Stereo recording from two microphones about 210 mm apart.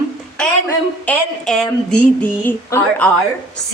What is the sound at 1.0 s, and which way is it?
A woman's voice, 5° left (ahead or behind).